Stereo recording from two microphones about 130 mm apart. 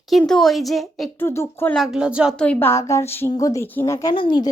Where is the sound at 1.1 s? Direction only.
20° left (ahead or behind).